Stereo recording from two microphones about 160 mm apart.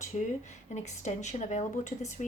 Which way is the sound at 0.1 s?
50° left (ahead or behind).